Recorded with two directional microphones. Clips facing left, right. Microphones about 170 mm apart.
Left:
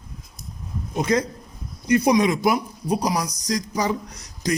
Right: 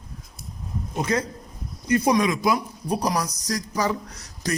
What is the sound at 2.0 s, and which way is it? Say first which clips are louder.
Speech: left 2 dB; 20° left (ahead or behind).